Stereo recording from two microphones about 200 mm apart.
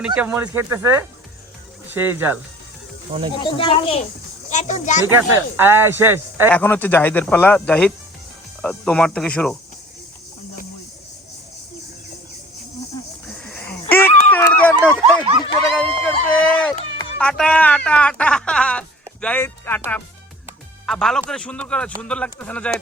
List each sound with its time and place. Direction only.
0.0 s speech: 5° right (ahead or behind)
3.3 s a child's voice: 25° left (ahead or behind)
5.0 s speech: 10° right (ahead or behind)
6.5 s speech: 10° left (ahead or behind)
8.6 s cricket: 5° left (ahead or behind)
13.4 s a sound: 5° left (ahead or behind)
20.8 s speech: centre (ahead or behind)
22.0 s cricket: 5° left (ahead or behind)